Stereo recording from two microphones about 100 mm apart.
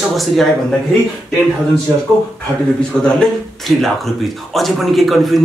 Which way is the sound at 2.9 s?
10° left (ahead or behind).